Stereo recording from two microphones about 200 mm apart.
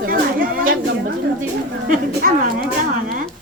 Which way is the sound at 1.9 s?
45° right (ahead or behind).